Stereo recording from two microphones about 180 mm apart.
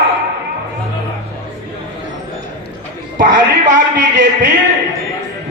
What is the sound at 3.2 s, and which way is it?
Speech, 45° right (ahead or behind).